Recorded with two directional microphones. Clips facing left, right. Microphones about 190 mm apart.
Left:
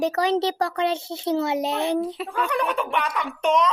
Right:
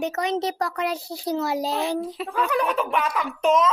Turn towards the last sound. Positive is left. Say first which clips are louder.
# right 1 dB
turn(degrees=0)  # may be behind; listen again after turning